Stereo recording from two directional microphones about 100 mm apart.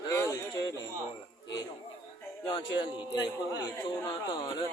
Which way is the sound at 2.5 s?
60° left (ahead or behind).